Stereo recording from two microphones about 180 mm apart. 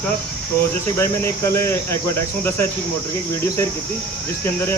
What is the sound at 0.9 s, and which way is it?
Speech, 15° left (ahead or behind).